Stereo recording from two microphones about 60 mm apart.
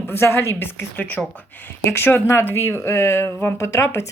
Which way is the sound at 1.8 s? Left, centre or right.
Left.